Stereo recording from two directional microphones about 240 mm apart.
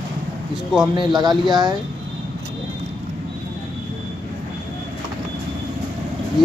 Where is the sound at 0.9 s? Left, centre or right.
Centre.